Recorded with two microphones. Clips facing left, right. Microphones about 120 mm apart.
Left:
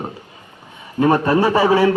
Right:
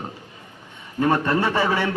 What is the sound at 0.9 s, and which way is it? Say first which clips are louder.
Speech: left 5 dB; 30° left (ahead or behind).